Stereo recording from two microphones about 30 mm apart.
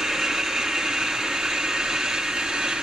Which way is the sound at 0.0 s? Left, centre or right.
Centre.